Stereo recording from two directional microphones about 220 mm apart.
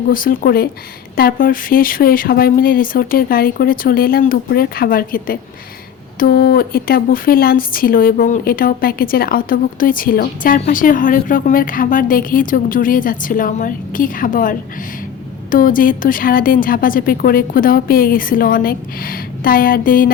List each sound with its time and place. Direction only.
0.1 s speech: 40° left (ahead or behind)